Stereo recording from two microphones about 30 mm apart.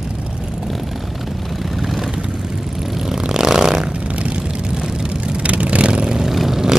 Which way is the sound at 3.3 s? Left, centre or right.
Right.